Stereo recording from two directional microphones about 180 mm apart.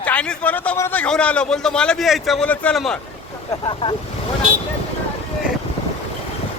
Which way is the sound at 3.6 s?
25° left (ahead or behind).